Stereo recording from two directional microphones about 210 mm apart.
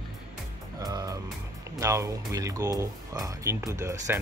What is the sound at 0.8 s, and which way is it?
Speech, 15° right (ahead or behind).